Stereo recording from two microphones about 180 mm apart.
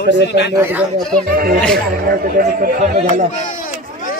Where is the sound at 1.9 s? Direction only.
55° right (ahead or behind).